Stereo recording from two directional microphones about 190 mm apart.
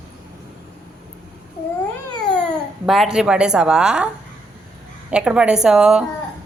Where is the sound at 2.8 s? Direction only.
Centre (ahead or behind).